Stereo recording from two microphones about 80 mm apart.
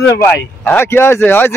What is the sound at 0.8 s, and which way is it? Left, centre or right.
Speech, left.